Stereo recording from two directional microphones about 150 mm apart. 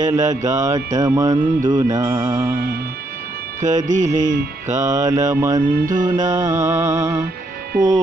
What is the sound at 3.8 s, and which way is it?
Mantra, 55° right (ahead or behind).